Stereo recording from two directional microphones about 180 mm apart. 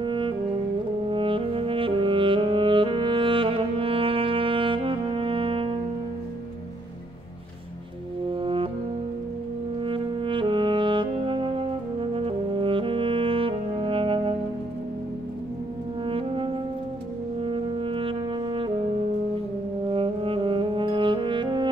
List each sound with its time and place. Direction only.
0.0 s saxophone: 25° right (ahead or behind)
8.4 s brass instrument: 30° right (ahead or behind)
9.8 s brass instrument: 30° right (ahead or behind)
16.1 s brass instrument: 30° right (ahead or behind)
19.9 s brass instrument: 30° right (ahead or behind)